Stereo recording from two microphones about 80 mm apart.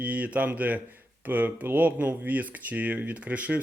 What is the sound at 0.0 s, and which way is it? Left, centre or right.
Speech, centre.